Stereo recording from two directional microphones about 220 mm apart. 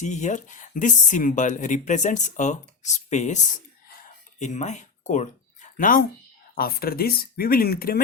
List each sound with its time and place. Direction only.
0.0 s speech: 35° left (ahead or behind)